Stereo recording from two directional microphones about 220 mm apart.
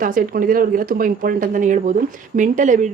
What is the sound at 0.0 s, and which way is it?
Speech, 40° right (ahead or behind).